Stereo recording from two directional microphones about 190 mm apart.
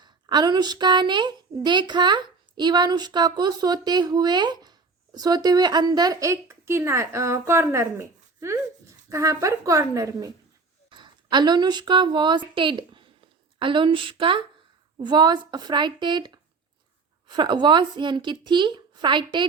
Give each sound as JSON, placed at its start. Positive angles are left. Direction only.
{"t": 0.0, "sound": "a woman's voice", "side_deg": -20}